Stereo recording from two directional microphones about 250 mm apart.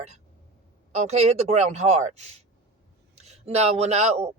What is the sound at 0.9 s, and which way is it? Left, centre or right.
Speech, right.